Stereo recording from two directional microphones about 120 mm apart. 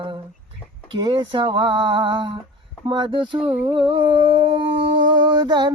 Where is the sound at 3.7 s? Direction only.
45° right (ahead or behind).